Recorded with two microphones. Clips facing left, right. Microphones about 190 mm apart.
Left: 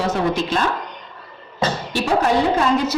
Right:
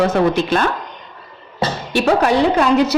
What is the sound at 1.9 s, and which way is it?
Speech, 65° right (ahead or behind).